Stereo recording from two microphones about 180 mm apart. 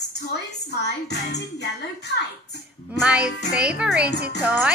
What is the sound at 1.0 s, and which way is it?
Music, 70° left (ahead or behind).